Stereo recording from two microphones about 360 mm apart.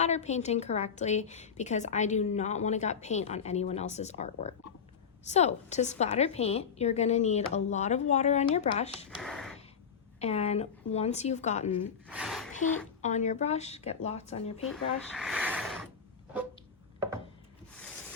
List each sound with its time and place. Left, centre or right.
0.0 s a woman's voice: centre
9.0 s speech: centre
10.2 s speech: centre
12.0 s a sound: centre
13.0 s speech: centre
14.7 s speech: centre